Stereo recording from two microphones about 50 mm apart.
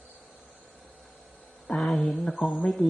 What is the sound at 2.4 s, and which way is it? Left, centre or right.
Speech, centre.